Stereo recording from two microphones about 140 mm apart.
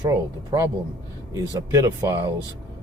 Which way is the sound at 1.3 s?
25° right (ahead or behind).